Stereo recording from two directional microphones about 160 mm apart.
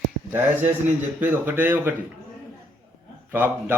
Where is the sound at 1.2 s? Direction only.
10° right (ahead or behind).